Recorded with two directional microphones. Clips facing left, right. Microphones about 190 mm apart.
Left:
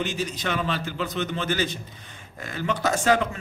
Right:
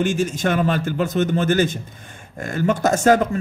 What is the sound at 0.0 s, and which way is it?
A man's voice, 50° right (ahead or behind).